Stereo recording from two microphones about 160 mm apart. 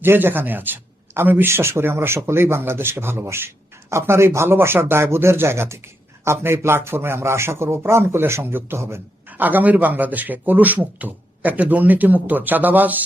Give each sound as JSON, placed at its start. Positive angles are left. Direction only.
{"t": 0.0, "sound": "speech", "side_deg": -15}